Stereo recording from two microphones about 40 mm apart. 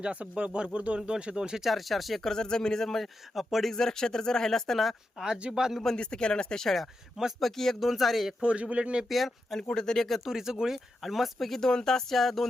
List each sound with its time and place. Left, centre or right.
0.0 s speech: right
1.6 s speech: centre
2.3 s speech: centre
3.8 s speech: centre
5.4 s speech: centre
5.7 s speech: centre
6.0 s speech: left
7.3 s speech: centre
8.4 s speech: right
9.0 s speech: centre
9.7 s speech: centre
10.2 s speech: centre
11.0 s speech: centre
12.1 s speech: centre